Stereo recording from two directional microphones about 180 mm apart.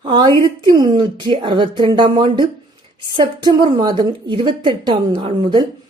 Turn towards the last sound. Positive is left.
turn(degrees=-25)  # may be behind; listen again after turning